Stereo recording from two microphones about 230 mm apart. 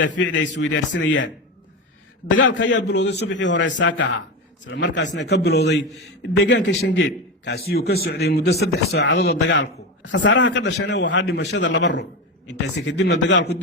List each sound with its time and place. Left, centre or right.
0.0 s a man's voice: left
2.4 s a man's voice: left